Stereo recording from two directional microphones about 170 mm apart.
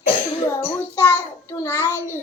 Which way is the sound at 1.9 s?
15° right (ahead or behind).